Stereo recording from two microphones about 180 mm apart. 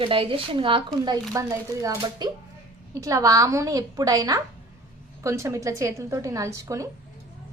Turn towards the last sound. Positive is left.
turn(degrees=-15)  # may be behind; listen again after turning